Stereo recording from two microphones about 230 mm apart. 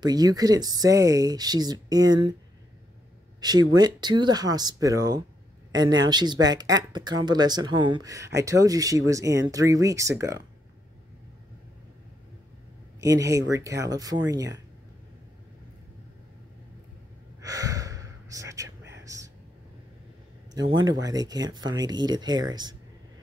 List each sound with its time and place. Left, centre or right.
0.0 s speech: centre
3.3 s speech: centre
13.0 s speech: centre
17.4 s gasp: centre
19.0 s a sound: centre
20.7 s speech: centre